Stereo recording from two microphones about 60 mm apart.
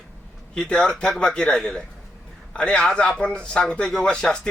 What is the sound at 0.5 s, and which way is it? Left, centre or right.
A man's voice, centre.